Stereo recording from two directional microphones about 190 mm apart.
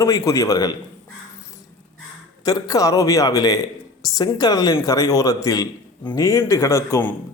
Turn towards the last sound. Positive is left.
turn(degrees=10)  # may be behind; listen again after turning